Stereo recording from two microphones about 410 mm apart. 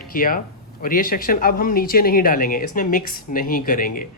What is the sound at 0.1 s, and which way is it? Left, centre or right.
Speech, left.